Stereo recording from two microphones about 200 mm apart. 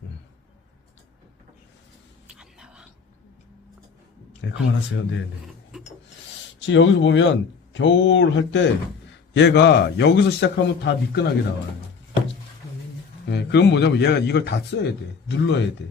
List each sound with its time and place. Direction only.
2.2 s whispering: 5° right (ahead or behind)
4.4 s a man's voice: 65° left (ahead or behind)
6.6 s a man's voice: 70° left (ahead or behind)
13.2 s a man's voice: 60° left (ahead or behind)